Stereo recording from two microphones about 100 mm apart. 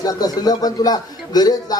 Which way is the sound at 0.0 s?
40° left (ahead or behind).